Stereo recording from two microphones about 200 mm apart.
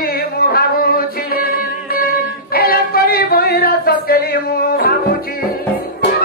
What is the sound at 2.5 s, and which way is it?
Music, 50° left (ahead or behind).